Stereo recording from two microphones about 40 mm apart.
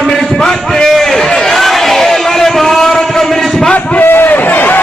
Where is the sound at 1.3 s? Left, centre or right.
Centre.